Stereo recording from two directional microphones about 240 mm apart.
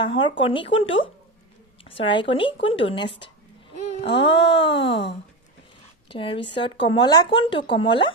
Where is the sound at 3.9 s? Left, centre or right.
Left.